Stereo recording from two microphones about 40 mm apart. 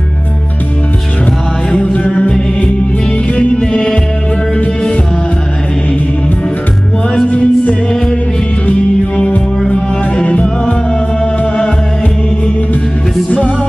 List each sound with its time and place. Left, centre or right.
1.7 s music: left
3.3 s music: left
7.2 s music: left